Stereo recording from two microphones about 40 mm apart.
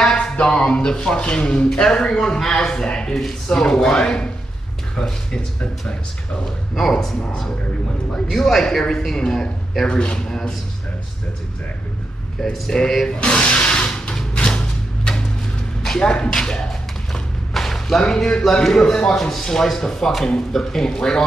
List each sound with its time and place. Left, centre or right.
0.1 s speech: left; by 5.4 s centre
6.7 s speech: centre
9.8 s speech: left
12.6 s speech: centre
13.2 s a sound: left
14.3 s music: left
15.8 s speech: centre
17.1 s a sound: centre
18.0 s speech: centre